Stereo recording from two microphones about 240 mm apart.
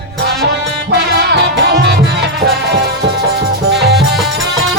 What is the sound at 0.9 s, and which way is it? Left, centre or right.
Music, right.